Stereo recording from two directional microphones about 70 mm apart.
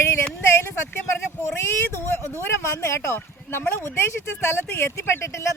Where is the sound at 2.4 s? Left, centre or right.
Left.